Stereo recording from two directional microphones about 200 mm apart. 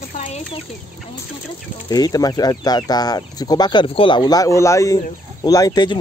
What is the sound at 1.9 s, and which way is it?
Speech, 20° left (ahead or behind).